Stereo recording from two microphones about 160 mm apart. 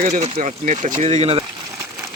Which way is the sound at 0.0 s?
45° right (ahead or behind).